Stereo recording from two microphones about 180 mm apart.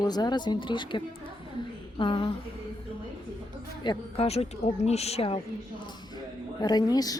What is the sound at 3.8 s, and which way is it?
Speech, 30° left (ahead or behind).